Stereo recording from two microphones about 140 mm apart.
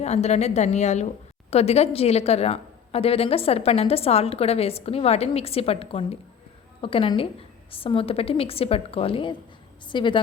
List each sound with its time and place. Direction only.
0.0 s a woman's voice: 50° left (ahead or behind); by 10.2 s 35° left (ahead or behind)